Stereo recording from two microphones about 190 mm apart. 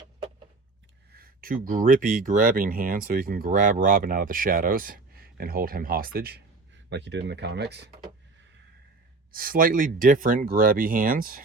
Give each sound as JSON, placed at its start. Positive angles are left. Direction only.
{"t": 1.1, "sound": "speech", "side_deg": -50}
{"t": 6.9, "sound": "speech", "side_deg": -65}
{"t": 9.3, "sound": "speech", "side_deg": -50}